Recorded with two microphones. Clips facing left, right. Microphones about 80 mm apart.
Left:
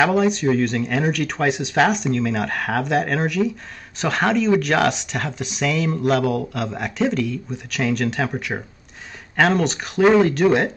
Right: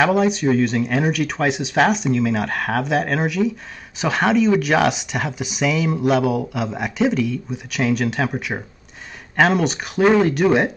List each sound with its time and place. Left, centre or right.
0.0 s speech: centre